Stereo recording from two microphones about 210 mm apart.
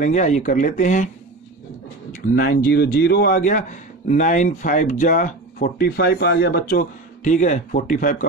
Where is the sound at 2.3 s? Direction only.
45° left (ahead or behind).